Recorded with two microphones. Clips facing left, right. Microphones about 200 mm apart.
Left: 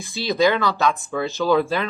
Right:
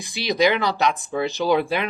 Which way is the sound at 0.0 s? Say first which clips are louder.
Left 1 dB; 15° right (ahead or behind).